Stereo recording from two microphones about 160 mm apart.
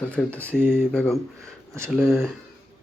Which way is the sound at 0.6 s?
15° right (ahead or behind).